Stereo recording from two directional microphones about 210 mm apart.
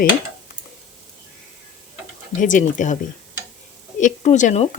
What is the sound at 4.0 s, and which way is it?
Speech, 35° left (ahead or behind).